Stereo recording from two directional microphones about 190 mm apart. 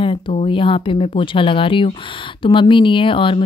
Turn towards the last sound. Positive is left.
turn(degrees=25)  # may be behind; listen again after turning